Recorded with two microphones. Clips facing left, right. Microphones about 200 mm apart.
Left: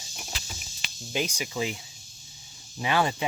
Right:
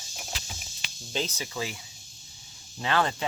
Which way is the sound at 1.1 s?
15° left (ahead or behind).